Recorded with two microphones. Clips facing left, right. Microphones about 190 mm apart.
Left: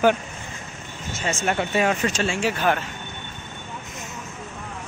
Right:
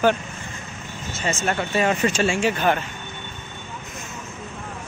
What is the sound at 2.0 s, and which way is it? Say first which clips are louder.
Speech: right 3 dB; 5° right (ahead or behind).